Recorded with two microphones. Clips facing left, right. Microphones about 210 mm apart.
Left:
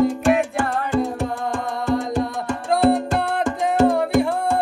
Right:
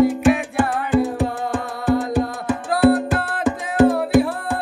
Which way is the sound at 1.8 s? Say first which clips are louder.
Right 3 dB; 5° right (ahead or behind).